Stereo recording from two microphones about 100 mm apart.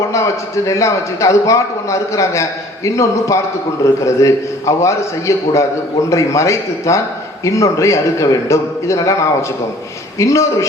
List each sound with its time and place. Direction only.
0.1 s a man's voice: 30° left (ahead or behind)
10.2 s a man's voice: 30° left (ahead or behind)